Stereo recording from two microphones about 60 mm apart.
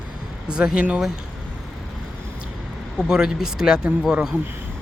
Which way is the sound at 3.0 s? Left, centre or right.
Centre.